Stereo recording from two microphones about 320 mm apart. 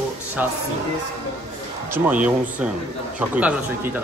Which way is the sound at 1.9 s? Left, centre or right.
Centre.